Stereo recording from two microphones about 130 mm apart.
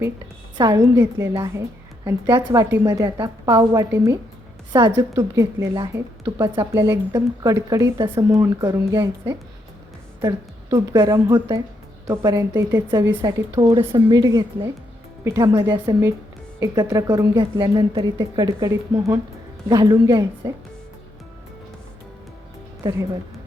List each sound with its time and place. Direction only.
0.5 s a woman's voice: 30° right (ahead or behind)
0.9 s a woman's voice: 20° right (ahead or behind)
4.7 s a woman's voice: 35° right (ahead or behind)
10.2 s a woman's voice: 30° right (ahead or behind)
22.8 s speech: 25° right (ahead or behind)